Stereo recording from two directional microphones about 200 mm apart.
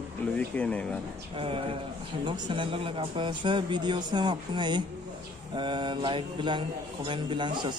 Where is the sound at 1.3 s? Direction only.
25° right (ahead or behind).